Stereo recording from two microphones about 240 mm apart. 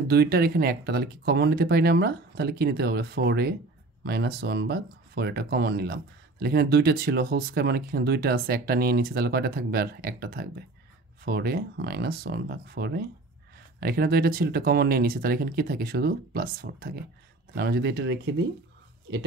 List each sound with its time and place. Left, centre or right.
0.1 s speech: right